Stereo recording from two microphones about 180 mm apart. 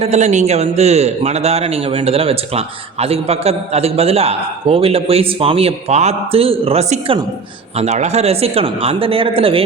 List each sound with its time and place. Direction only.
0.0 s a man's voice: 40° right (ahead or behind)